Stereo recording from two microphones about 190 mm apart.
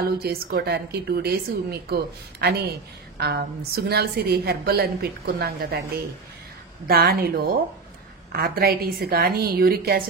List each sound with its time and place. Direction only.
0.2 s a woman's voice: 55° right (ahead or behind)
6.9 s a woman's voice: 50° right (ahead or behind)